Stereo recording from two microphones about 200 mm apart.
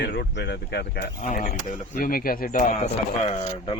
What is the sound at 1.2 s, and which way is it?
A man's voice, 40° left (ahead or behind).